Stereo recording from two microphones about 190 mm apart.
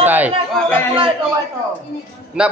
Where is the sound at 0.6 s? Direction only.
5° left (ahead or behind).